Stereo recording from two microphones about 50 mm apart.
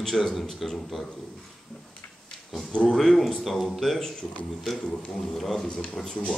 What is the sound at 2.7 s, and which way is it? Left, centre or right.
Speech, centre.